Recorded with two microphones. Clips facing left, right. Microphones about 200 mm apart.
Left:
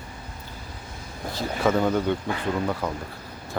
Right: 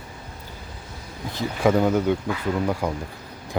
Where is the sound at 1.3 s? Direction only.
10° right (ahead or behind).